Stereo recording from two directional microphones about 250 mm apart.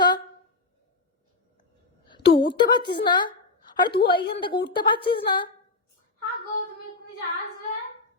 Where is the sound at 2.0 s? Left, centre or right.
Centre.